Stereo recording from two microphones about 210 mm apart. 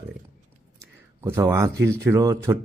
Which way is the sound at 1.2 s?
15° right (ahead or behind).